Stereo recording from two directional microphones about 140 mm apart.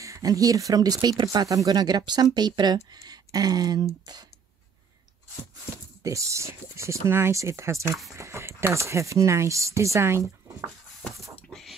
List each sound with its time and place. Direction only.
0.0 s speech: 25° right (ahead or behind)
6.0 s speech: 20° right (ahead or behind)